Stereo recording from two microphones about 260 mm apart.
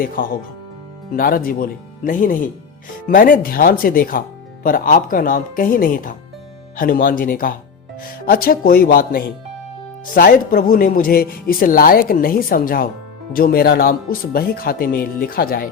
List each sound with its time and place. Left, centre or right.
0.2 s speech: left